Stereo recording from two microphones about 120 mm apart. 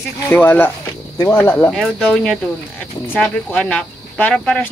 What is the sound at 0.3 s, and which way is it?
Speech, 15° left (ahead or behind).